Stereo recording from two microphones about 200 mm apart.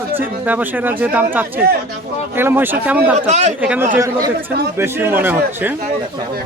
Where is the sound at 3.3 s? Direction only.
35° right (ahead or behind).